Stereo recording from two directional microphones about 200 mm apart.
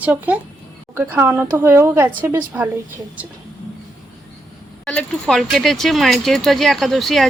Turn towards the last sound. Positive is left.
turn(degrees=0)  # may be behind; listen again after turning